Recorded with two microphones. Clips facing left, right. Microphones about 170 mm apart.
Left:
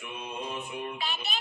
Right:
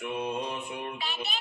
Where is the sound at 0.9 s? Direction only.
50° left (ahead or behind).